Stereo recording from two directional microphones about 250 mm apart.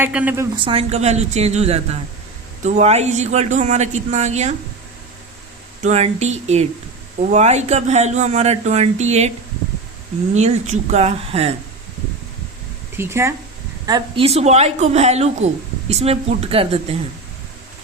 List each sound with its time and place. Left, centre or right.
0.0 s a woman's voice: centre
0.5 s speech: right
5.8 s speech: right
10.3 s speech: right
13.0 s a woman's voice: centre